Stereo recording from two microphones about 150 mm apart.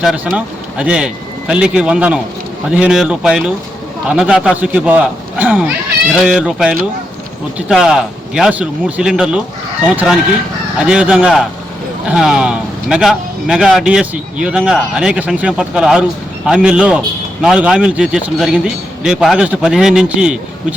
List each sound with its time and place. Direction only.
0.0 s a man's voice: 5° right (ahead or behind)